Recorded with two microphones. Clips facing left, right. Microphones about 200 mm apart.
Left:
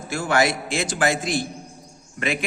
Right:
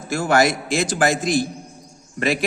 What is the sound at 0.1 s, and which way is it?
A man's voice, 40° right (ahead or behind).